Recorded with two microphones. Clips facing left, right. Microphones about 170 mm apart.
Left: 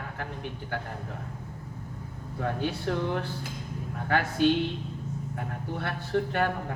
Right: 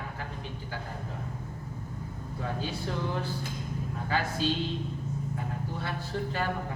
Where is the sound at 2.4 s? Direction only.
60° left (ahead or behind).